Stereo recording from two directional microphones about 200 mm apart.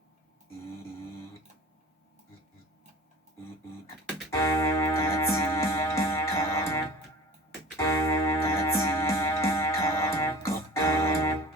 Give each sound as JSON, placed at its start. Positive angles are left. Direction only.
{"t": 4.3, "sound": "music", "side_deg": 15}